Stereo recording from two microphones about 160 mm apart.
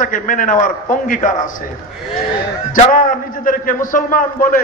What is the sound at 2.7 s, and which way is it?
A man's voice, 60° left (ahead or behind).